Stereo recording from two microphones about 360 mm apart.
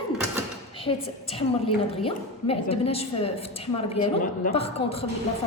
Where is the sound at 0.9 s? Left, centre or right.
Centre.